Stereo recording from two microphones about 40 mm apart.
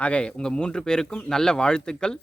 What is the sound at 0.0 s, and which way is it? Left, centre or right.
Speech, left.